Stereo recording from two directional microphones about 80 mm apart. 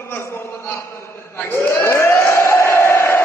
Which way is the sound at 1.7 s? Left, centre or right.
Left.